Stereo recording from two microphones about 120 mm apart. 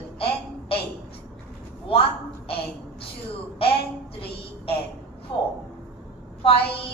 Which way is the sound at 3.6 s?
50° left (ahead or behind).